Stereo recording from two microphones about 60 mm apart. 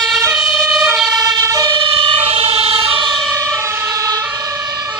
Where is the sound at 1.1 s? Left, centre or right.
Right.